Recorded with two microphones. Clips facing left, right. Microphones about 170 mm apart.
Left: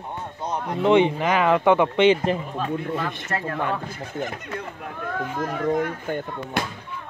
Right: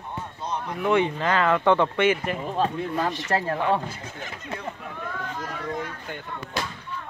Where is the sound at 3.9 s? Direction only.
55° left (ahead or behind).